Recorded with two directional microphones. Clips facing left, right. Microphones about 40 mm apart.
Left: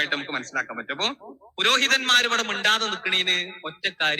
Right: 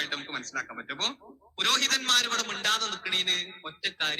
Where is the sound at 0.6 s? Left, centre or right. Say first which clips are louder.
Left 6 dB; left.